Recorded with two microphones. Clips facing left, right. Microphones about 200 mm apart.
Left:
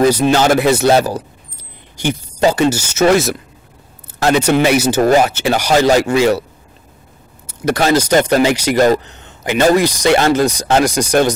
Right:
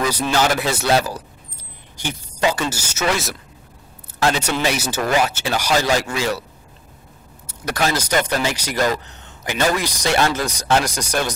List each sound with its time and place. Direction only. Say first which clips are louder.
0.0 s speech: left 8 dB; 55° left (ahead or behind)
3.0 s speech: left 10 dB; 50° left (ahead or behind)
5.0 s speech: left 4 dB; 45° left (ahead or behind)
7.6 s speech: left 8 dB; 50° left (ahead or behind)
8.4 s speech: left 9 dB; 60° left (ahead or behind)